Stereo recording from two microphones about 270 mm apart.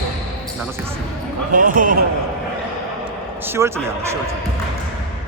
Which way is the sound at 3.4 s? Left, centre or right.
Centre.